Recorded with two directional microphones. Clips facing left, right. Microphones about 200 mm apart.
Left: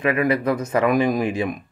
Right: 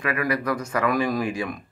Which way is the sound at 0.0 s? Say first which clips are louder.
Left 6 dB; 25° left (ahead or behind).